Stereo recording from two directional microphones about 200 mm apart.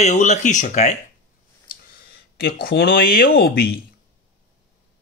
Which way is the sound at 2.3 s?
50° left (ahead or behind).